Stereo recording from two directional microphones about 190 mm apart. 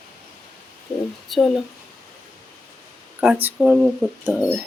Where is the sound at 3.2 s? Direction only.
5° right (ahead or behind).